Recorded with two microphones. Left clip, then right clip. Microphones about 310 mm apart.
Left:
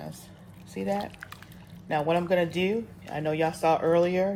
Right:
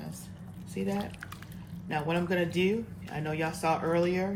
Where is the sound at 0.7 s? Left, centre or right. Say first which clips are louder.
Left 4 dB; left.